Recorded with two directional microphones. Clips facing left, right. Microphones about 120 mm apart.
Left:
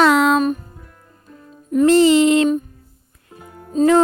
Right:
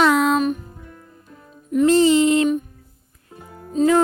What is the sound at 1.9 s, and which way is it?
Speech, 80° left.